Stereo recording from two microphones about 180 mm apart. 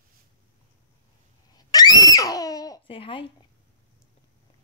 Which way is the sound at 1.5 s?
20° left (ahead or behind).